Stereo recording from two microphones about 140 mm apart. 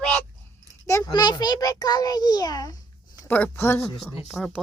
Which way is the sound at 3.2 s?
15° left (ahead or behind).